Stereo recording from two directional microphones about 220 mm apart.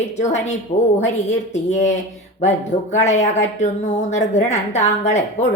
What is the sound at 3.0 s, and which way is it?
A woman's voice, 30° left (ahead or behind).